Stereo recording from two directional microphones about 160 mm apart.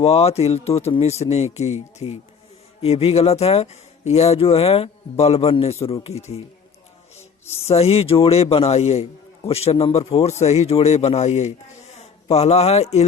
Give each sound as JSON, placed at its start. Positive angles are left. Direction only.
{"t": 0.0, "sound": "speech", "side_deg": 40}
{"t": 7.6, "sound": "speech", "side_deg": 40}